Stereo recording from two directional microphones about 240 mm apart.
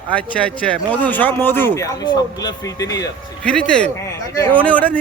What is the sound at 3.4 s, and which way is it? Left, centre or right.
Speech, centre.